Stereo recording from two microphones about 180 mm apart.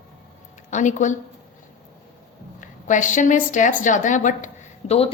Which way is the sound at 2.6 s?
45° left (ahead or behind).